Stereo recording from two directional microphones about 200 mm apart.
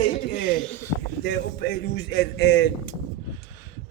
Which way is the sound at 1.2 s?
55° left (ahead or behind).